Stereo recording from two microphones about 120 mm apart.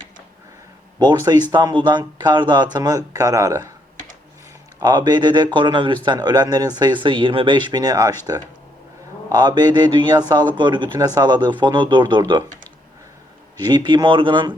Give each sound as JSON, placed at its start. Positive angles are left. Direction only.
{"t": 0.9, "sound": "a man's voice", "side_deg": -35}
{"t": 4.8, "sound": "a man's voice", "side_deg": -35}
{"t": 9.3, "sound": "a man's voice", "side_deg": -35}
{"t": 13.6, "sound": "a man's voice", "side_deg": -35}